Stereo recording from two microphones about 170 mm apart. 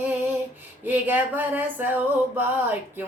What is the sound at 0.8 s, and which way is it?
Mantra, 10° right (ahead or behind).